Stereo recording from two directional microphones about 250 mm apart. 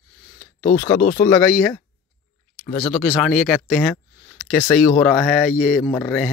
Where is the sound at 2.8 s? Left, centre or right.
Centre.